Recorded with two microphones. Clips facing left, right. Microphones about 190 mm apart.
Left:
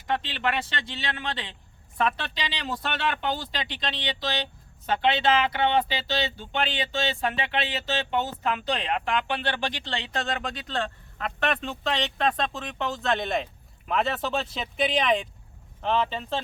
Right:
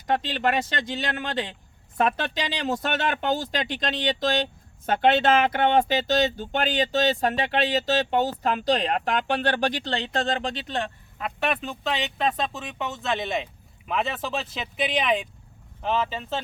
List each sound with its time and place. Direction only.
0.1 s speech: 40° right (ahead or behind); by 10.9 s 20° right (ahead or behind)
11.2 s speech: 5° right (ahead or behind)